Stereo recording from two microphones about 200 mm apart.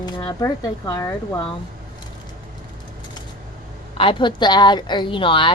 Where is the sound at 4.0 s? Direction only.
25° left (ahead or behind).